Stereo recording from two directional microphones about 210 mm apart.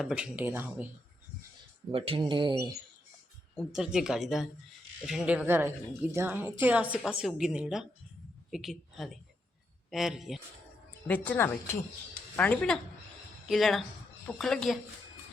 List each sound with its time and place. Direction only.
0.0 s speech: 5° right (ahead or behind)
1.9 s speech: 25° right (ahead or behind)
3.7 s a woman's voice: 5° right (ahead or behind)
11.1 s a woman's voice: 10° left (ahead or behind)